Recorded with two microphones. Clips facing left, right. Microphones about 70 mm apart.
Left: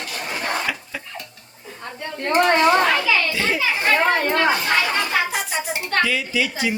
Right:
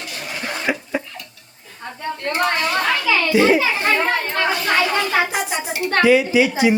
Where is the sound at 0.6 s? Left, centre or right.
Right.